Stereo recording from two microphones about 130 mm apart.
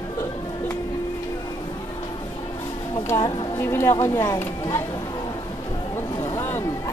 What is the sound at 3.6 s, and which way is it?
Speech, 20° left (ahead or behind).